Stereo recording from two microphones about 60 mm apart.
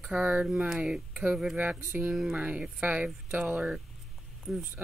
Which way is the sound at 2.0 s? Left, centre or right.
Centre.